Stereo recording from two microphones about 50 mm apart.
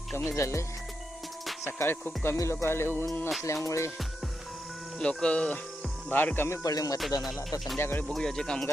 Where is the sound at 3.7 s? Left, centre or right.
Left.